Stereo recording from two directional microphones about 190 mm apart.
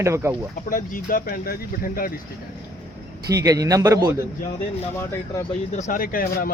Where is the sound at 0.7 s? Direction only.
45° left (ahead or behind).